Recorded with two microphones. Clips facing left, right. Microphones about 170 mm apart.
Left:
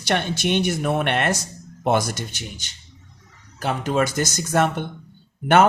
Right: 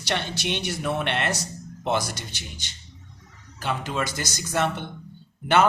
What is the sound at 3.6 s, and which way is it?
Speech, 45° left (ahead or behind).